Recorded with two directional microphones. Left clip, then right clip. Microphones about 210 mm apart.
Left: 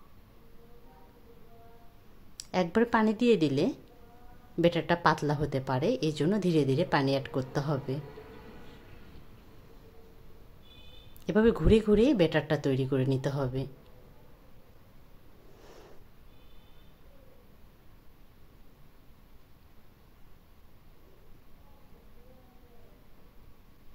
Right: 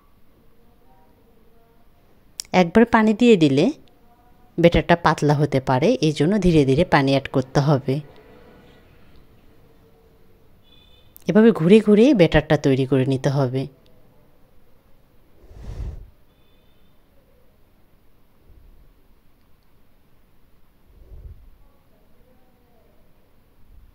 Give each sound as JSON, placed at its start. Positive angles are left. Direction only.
{"t": 2.3, "sound": "speech", "side_deg": -35}
{"t": 11.2, "sound": "speech", "side_deg": -30}
{"t": 15.6, "sound": "a sound", "side_deg": -25}